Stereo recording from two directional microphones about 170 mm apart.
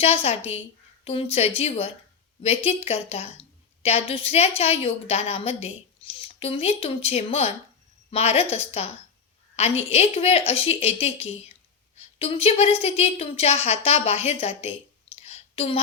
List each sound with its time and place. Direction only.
0.0 s a woman's voice: 35° left (ahead or behind)